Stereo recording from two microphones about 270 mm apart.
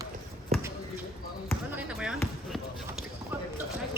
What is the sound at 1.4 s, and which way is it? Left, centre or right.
Basketball bounce, centre.